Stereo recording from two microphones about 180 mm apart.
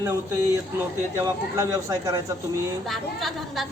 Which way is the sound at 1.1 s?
20° right (ahead or behind).